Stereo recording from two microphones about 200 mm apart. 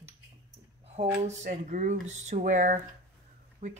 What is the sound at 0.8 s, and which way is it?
Speech, 30° right (ahead or behind).